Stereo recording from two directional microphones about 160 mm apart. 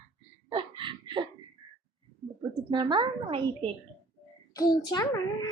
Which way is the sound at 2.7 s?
30° right (ahead or behind).